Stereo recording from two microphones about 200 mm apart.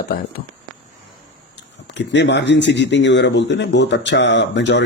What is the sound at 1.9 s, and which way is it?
Speech, 65° left (ahead or behind).